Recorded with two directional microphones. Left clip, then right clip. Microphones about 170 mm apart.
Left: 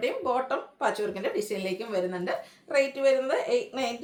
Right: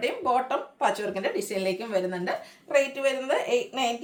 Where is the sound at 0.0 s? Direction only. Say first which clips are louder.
Right 2 dB; 15° right (ahead or behind).